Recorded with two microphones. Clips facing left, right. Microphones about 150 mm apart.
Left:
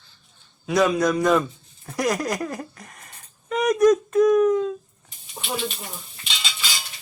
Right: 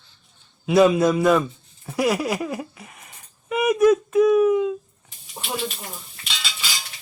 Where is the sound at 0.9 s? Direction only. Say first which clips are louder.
Right 2 dB; 5° right (ahead or behind).